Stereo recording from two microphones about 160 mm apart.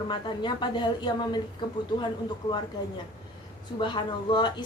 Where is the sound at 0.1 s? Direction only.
30° left (ahead or behind).